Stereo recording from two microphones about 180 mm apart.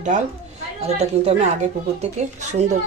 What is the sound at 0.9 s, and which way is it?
A woman's voice, 35° right (ahead or behind).